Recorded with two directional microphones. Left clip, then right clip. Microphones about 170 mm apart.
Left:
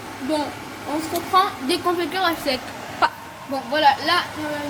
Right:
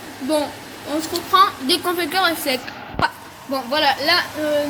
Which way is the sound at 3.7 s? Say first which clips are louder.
Even; 45° right (ahead or behind).